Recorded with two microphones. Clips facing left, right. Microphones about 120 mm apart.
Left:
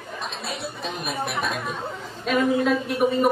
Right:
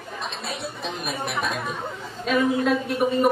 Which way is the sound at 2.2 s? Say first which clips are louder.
Even; centre (ahead or behind).